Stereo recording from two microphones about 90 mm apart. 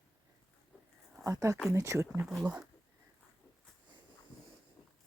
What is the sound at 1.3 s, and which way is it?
Speech, 35° right (ahead or behind).